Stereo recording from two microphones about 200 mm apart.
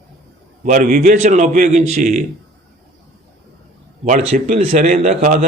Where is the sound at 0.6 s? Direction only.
40° right (ahead or behind).